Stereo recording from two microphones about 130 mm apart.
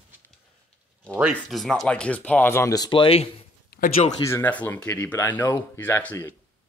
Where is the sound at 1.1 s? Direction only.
5° right (ahead or behind); by 2.9 s 25° left (ahead or behind).